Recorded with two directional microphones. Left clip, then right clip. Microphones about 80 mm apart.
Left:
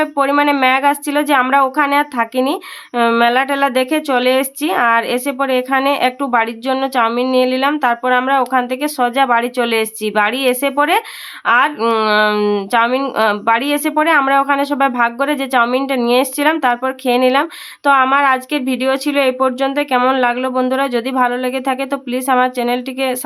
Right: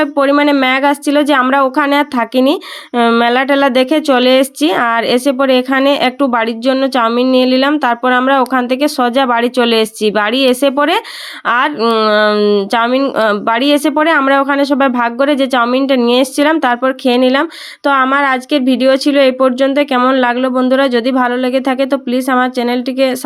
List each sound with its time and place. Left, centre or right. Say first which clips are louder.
0.3 s speech: right 3 dB; right
0.6 s speech: right 1 dB; right
1.5 s a woman's voice: right 2 dB; right
2.9 s a woman's voice: right 2 dB; right
11.8 s speech: right 3 dB; right
12.7 s speech: right 1 dB; right
13.4 s a woman's voice: right 3 dB; right
20.5 s speech: right 4 dB; right